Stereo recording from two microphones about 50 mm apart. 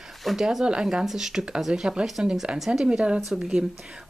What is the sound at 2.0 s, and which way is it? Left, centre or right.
Speech, centre.